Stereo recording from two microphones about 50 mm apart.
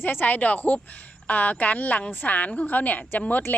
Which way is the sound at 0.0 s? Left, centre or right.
Left.